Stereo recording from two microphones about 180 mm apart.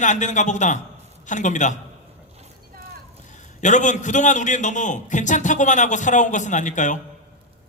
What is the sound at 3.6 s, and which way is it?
A man's voice, 45° left (ahead or behind).